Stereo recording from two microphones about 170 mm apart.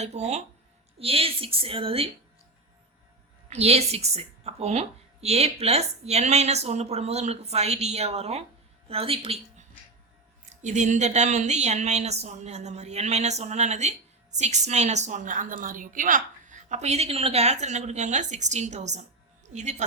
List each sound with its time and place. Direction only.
0.0 s a woman's voice: 40° right (ahead or behind)
3.5 s a woman's voice: 40° right (ahead or behind)
10.5 s a woman's voice: 45° right (ahead or behind)